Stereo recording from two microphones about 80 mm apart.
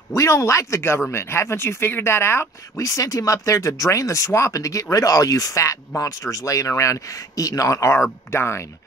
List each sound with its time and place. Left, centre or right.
0.1 s speech: left